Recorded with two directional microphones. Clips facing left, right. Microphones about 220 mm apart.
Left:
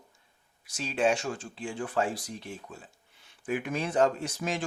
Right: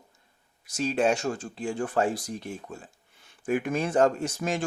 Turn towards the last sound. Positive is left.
turn(degrees=-45)  # may be behind; listen again after turning